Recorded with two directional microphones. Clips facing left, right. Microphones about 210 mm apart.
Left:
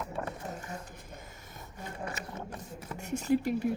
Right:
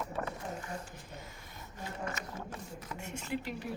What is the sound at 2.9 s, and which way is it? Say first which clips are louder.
Speech: left 10 dB; 40° left (ahead or behind).